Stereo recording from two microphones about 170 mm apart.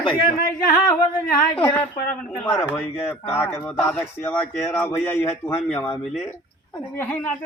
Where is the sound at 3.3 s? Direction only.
10° left (ahead or behind).